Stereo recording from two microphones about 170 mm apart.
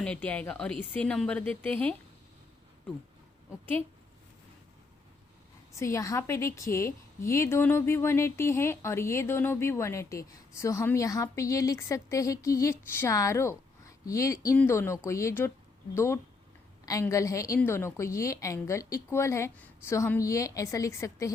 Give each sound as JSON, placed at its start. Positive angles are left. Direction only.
{"t": 0.0, "sound": "a woman's voice", "side_deg": 5}
{"t": 5.7, "sound": "a woman's voice", "side_deg": 15}